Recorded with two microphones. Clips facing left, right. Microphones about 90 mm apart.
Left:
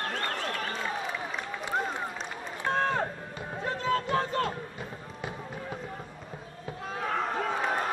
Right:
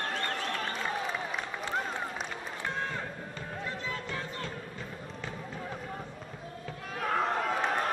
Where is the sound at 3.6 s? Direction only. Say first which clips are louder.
Left 10 dB; 50° left (ahead or behind); by 4.5 s 65° left (ahead or behind).